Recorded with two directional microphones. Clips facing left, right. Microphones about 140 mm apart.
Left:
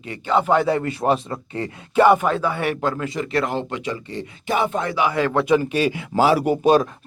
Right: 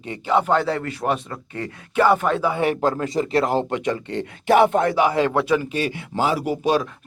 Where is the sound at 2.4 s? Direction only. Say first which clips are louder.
Right 2 dB; 20° right (ahead or behind).